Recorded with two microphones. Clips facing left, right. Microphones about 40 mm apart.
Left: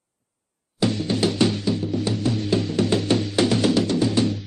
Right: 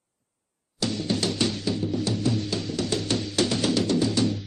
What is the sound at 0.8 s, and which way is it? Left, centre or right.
Music, centre.